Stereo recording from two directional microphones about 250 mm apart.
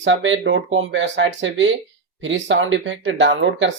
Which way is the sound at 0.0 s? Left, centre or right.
Right.